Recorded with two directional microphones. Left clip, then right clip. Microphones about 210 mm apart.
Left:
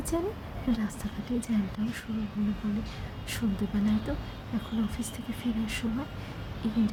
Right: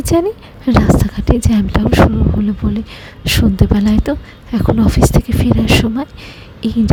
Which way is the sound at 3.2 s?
45° right (ahead or behind).